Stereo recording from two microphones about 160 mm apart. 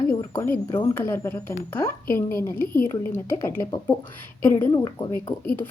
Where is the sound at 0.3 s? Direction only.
15° left (ahead or behind).